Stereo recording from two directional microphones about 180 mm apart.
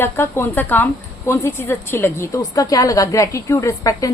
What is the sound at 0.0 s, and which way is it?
A woman's voice, 15° left (ahead or behind).